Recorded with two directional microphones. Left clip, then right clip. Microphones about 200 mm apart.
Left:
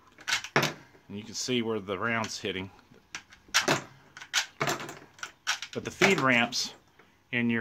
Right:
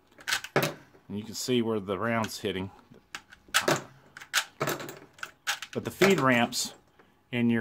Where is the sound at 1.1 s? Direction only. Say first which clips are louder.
Right 2 dB; 30° right (ahead or behind).